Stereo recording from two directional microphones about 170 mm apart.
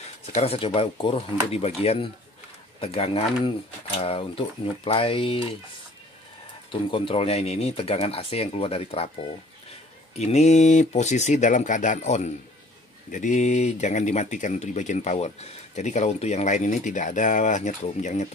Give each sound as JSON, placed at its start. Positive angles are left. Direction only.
{"t": 0.3, "sound": "speech", "side_deg": 35}
{"t": 6.7, "sound": "speech", "side_deg": 30}
{"t": 10.1, "sound": "speech", "side_deg": 40}